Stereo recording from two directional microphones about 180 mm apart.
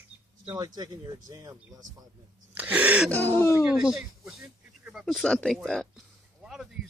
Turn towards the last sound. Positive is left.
turn(degrees=-5)  # may be behind; listen again after turning